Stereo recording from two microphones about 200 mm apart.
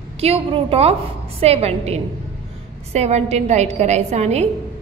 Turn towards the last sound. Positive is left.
turn(degrees=-35)  # may be behind; listen again after turning